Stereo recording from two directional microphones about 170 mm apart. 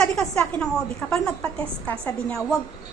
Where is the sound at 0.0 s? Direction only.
5° left (ahead or behind).